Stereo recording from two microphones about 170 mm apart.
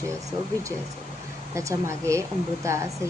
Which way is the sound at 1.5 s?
15° right (ahead or behind).